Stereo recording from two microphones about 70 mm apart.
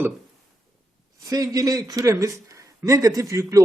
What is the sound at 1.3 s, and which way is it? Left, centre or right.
A man's voice, right.